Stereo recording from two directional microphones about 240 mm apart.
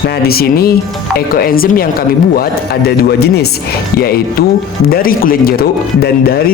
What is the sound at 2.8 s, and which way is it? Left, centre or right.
Speech, left.